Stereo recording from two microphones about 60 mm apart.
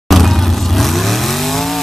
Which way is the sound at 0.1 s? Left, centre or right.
Centre.